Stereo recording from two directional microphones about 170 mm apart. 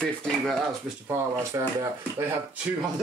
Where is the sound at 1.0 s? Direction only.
15° right (ahead or behind).